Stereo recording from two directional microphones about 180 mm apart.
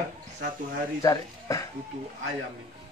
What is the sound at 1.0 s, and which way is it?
Speech, 20° left (ahead or behind).